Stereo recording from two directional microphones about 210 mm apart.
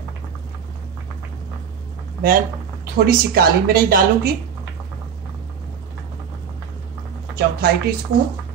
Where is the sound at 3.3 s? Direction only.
45° right (ahead or behind).